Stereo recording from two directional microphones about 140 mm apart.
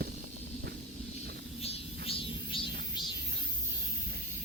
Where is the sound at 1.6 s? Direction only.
40° left (ahead or behind).